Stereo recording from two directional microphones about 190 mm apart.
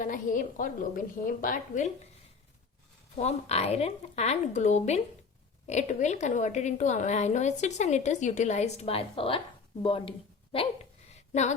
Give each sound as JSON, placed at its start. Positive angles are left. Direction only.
{"t": 0.0, "sound": "a woman's voice", "side_deg": 45}
{"t": 3.2, "sound": "a woman's voice", "side_deg": 35}